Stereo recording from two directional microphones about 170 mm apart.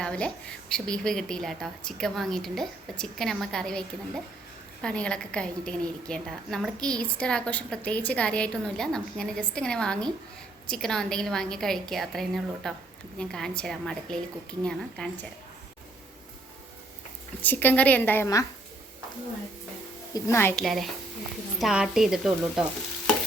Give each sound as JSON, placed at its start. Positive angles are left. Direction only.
{"t": 0.0, "sound": "a woman's voice", "side_deg": 5}
{"t": 17.4, "sound": "a woman's voice", "side_deg": 10}
{"t": 20.1, "sound": "a woman's voice", "side_deg": 15}
{"t": 20.6, "sound": "a woman's voice", "side_deg": 0}